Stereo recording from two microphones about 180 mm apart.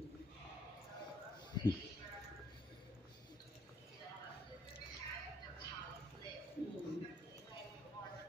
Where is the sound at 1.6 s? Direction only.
25° left (ahead or behind).